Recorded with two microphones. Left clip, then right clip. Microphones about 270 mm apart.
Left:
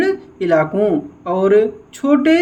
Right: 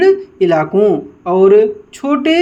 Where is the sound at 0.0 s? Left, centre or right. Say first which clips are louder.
Right 7 dB; centre.